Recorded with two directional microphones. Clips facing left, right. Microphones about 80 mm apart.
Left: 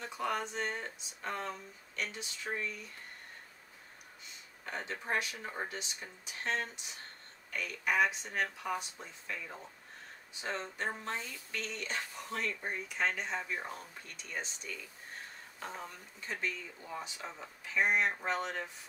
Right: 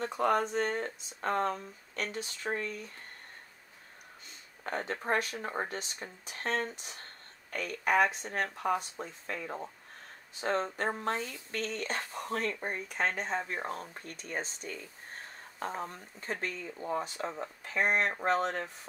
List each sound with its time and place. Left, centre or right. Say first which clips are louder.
0.0 s speech: right 7 dB; right
4.6 s speech: right 5 dB; right